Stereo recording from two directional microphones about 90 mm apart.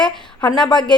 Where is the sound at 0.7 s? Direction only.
55° left (ahead or behind).